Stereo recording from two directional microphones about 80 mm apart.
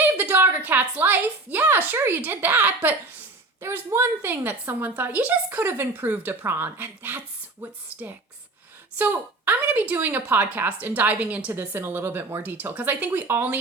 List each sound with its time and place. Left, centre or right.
0.2 s a woman's voice: right
3.6 s a woman's voice: right
9.0 s a woman's voice: right
11.5 s a woman's voice: right